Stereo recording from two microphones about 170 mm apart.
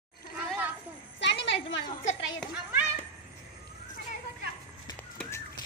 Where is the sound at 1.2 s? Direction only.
90° left.